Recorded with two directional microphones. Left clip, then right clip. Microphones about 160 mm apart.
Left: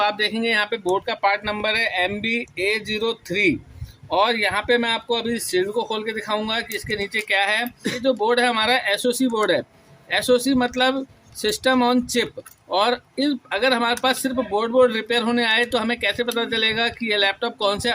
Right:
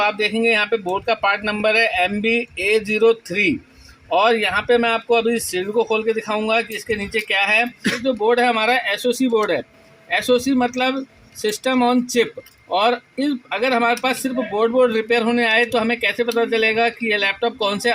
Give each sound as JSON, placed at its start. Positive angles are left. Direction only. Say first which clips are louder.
{"t": 0.0, "sound": "speech", "louder": "right 3 dB", "side_deg": 0}
{"t": 3.2, "sound": "speech", "louder": "right 1 dB", "side_deg": -90}
{"t": 4.1, "sound": "speech", "louder": "right 3 dB", "side_deg": 0}